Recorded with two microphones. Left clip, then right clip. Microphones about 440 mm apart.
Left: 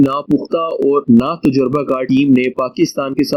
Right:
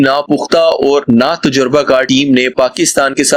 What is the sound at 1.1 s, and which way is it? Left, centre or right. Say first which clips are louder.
Speech: right 3 dB; right.